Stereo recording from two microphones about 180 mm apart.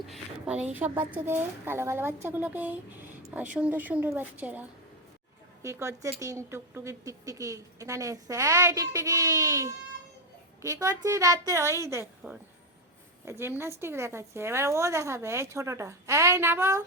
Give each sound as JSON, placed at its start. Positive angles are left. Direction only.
{"t": 0.0, "sound": "a woman's voice", "side_deg": -5}
{"t": 5.6, "sound": "a woman's voice", "side_deg": -15}